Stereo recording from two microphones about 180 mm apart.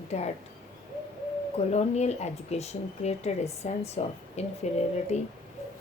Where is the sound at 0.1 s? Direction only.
35° left (ahead or behind).